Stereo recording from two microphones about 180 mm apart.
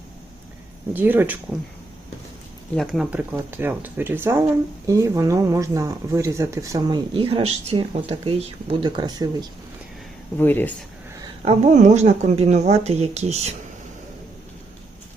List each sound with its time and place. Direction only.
0.9 s speech: 10° right (ahead or behind)
2.7 s speech: centre (ahead or behind); by 9.5 s 20° right (ahead or behind)
10.3 s speech: 10° left (ahead or behind)
11.4 s speech: 40° right (ahead or behind)